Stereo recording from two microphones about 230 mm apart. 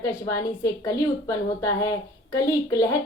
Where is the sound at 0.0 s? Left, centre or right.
Centre.